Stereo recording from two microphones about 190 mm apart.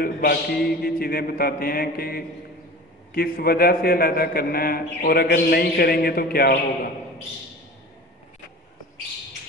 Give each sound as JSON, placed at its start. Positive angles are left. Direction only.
{"t": 0.0, "sound": "a man's voice", "side_deg": 50}